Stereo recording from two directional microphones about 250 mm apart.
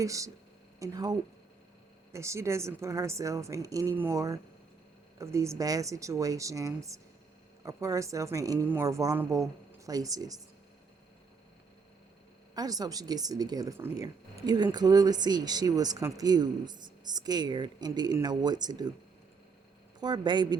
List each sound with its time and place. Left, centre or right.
0.0 s speech: centre
2.1 s speech: centre
12.5 s speech: centre
20.0 s speech: centre